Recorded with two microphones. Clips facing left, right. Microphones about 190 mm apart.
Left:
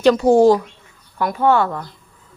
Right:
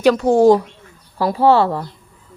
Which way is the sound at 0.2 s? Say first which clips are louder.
Left 2 dB; 5° left (ahead or behind).